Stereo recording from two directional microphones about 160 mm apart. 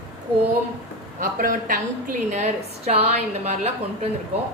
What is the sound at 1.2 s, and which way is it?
A woman's voice, 60° right (ahead or behind).